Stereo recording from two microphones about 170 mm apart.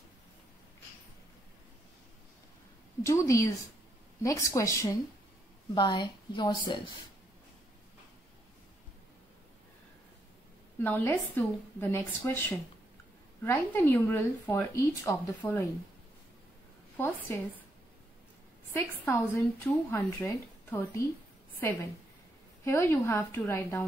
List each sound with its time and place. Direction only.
3.0 s a woman's voice: 15° left (ahead or behind)
10.8 s speech: 10° left (ahead or behind)
16.9 s a woman's voice: 10° left (ahead or behind)
19.0 s speech: 20° left (ahead or behind)
22.7 s speech: 15° left (ahead or behind)